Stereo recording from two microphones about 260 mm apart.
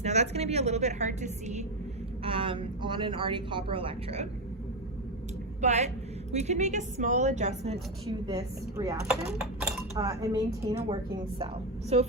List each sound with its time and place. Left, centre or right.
0.0 s a woman's voice: right
5.6 s a woman's voice: right
9.4 s chink: centre
10.0 s a woman's voice: centre